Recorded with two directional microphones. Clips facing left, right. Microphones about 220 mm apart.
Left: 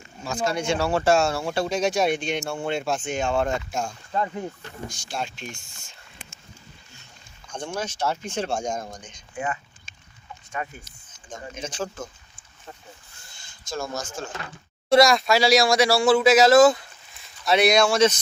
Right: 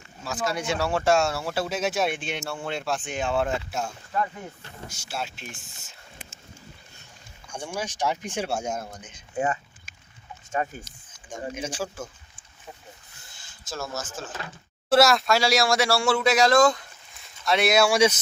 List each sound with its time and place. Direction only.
0.3 s speech: centre (ahead or behind)
7.4 s speech: 10° right (ahead or behind)
9.3 s speech: 40° right (ahead or behind)
10.6 s speech: 35° right (ahead or behind)
11.5 s speech: 10° right (ahead or behind)
13.3 s speech: 5° right (ahead or behind)
17.8 s speech: 10° right (ahead or behind)